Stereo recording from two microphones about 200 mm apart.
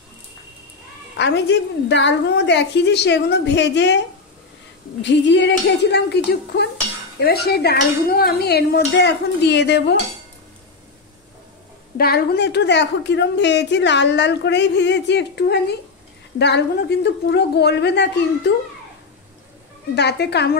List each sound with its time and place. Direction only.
1.1 s a woman's voice: 60° left (ahead or behind)
5.0 s a woman's voice: 60° left (ahead or behind)
12.0 s a woman's voice: 50° left (ahead or behind)
20.0 s a woman's voice: 55° left (ahead or behind)